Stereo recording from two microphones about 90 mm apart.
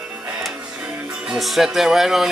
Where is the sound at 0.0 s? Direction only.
15° right (ahead or behind).